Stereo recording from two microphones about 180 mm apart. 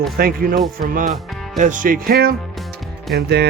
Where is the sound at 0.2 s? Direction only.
55° right (ahead or behind).